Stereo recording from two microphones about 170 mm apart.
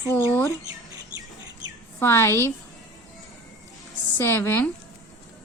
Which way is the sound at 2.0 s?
15° left (ahead or behind).